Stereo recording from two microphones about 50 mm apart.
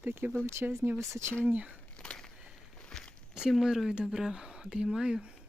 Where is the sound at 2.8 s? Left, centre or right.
Centre.